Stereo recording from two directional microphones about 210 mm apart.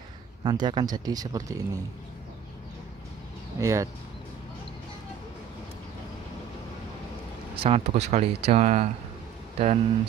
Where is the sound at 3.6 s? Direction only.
15° right (ahead or behind).